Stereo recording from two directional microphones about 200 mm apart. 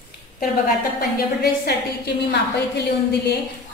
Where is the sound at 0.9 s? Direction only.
50° left (ahead or behind).